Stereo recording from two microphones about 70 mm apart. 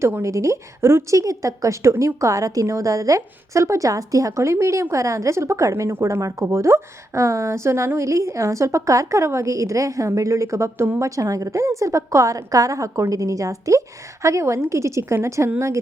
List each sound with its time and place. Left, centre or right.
0.0 s a woman's voice: right
1.2 s a woman's voice: right